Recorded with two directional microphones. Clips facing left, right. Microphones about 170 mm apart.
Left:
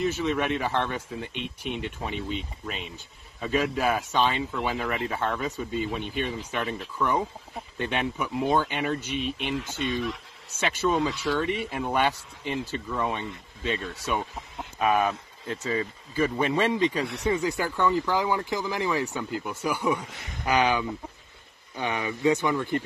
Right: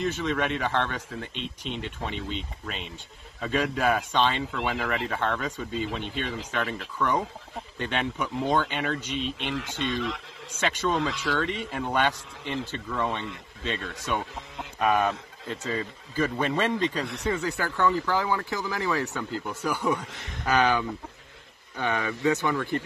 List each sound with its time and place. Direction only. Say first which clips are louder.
0.0 s speech: left 1 dB; 10° left (ahead or behind)
9.6 s speech: even; 90° right
10.6 s speech: left 1 dB; 10° left (ahead or behind)